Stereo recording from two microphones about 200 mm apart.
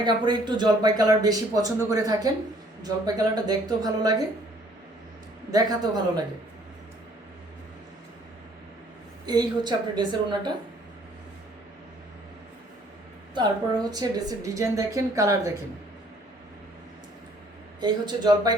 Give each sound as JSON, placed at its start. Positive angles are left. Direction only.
{"t": 0.0, "sound": "speech", "side_deg": -25}
{"t": 5.5, "sound": "speech", "side_deg": -20}
{"t": 9.2, "sound": "speech", "side_deg": -20}
{"t": 13.3, "sound": "a woman's voice", "side_deg": -20}
{"t": 17.7, "sound": "speech", "side_deg": -20}